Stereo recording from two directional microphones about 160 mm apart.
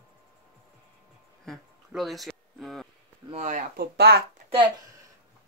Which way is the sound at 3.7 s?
90° right.